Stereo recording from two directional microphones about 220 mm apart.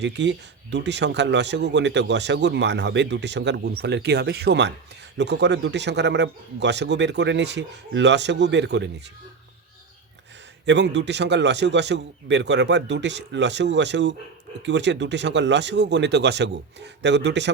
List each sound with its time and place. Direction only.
0.0 s speech: 50° right (ahead or behind)
10.7 s speech: 50° right (ahead or behind)